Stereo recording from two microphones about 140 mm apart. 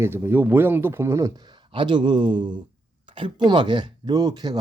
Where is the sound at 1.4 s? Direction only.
35° right (ahead or behind).